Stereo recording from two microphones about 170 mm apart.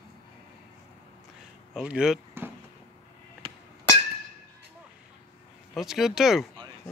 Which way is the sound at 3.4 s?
30° right (ahead or behind).